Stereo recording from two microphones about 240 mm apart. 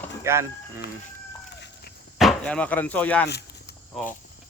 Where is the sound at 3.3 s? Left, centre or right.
Left.